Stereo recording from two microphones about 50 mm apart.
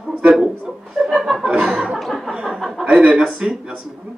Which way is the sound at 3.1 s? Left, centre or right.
Right.